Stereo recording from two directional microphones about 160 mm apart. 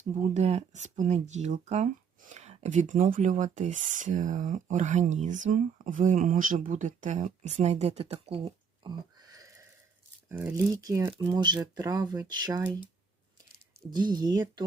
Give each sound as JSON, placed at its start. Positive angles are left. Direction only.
{"t": 0.2, "sound": "speech", "side_deg": -45}
{"t": 10.2, "sound": "speech", "side_deg": -10}
{"t": 10.8, "sound": "speech", "side_deg": -20}
{"t": 13.9, "sound": "speech", "side_deg": -25}